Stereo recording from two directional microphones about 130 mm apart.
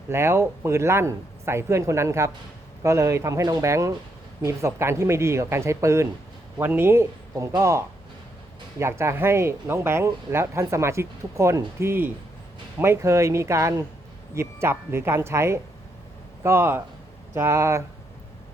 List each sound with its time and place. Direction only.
0.1 s speech: 20° right (ahead or behind)